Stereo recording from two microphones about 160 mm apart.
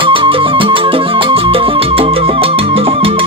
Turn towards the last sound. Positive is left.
turn(degrees=-35)  # may be behind; listen again after turning